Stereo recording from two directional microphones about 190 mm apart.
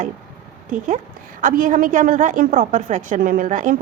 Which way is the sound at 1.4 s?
45° right (ahead or behind).